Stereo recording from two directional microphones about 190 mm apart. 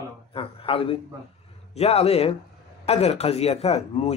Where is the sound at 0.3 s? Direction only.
30° left (ahead or behind).